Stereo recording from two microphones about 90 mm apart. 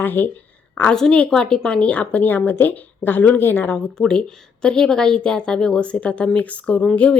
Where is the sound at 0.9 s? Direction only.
10° left (ahead or behind).